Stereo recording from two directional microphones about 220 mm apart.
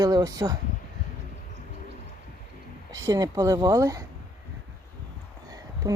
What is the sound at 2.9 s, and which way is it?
Speech, 15° right (ahead or behind).